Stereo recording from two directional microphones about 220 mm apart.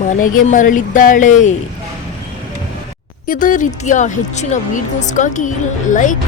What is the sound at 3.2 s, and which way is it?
A woman's voice, 40° left (ahead or behind).